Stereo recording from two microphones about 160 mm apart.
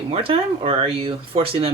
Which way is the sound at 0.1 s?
35° right (ahead or behind).